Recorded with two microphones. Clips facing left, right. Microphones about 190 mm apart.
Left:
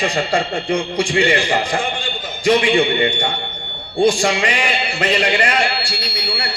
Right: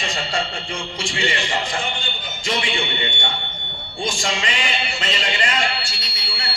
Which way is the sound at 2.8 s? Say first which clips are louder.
Left 9 dB; 40° left (ahead or behind).